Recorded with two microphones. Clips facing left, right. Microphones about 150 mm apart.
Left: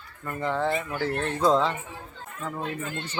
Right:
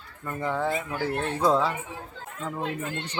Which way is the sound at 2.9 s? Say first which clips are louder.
Right 1 dB; 75° right (ahead or behind).